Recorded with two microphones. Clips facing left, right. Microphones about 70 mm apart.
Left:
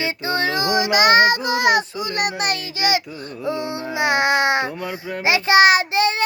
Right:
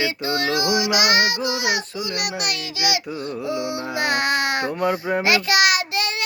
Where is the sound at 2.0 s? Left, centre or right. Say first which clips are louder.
Left 4 dB; left.